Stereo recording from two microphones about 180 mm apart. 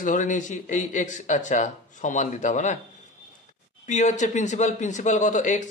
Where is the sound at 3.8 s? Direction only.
40° left (ahead or behind).